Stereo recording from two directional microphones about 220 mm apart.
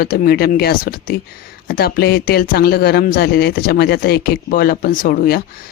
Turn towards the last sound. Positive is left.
turn(degrees=45)  # may be behind; listen again after turning